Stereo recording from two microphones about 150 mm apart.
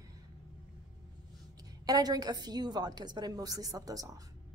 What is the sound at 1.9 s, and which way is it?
A woman's voice, 25° right (ahead or behind).